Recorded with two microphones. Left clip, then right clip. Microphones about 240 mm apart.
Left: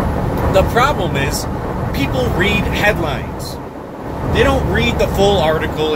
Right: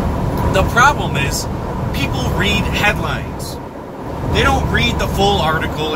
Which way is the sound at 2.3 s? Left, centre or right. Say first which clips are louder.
Right 2 dB; right.